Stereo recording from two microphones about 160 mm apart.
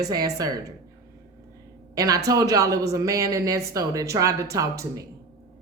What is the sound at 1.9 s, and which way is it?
Speech, 20° right (ahead or behind).